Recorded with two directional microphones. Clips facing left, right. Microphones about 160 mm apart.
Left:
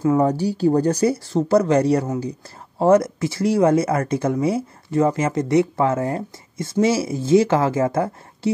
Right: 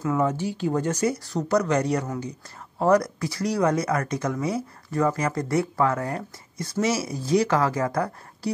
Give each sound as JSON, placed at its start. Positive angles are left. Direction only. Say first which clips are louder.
{"t": 0.0, "sound": "speech", "louder": "left 6 dB", "side_deg": 35}